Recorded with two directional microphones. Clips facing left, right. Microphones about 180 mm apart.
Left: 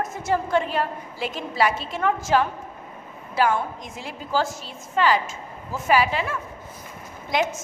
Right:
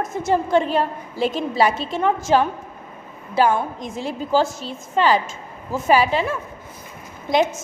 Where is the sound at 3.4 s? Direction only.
25° right (ahead or behind).